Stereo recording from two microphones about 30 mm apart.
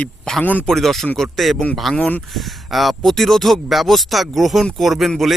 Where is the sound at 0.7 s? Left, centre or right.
Centre.